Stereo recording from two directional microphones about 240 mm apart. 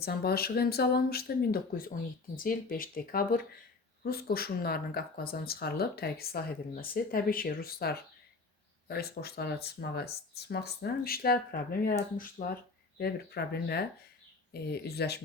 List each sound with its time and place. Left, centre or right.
0.0 s speech: left